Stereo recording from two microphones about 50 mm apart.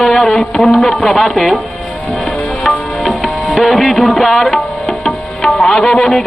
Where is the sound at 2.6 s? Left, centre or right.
Centre.